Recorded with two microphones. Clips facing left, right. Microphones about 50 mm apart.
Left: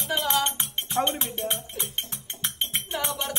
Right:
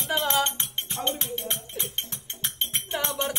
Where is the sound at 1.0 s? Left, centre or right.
Centre.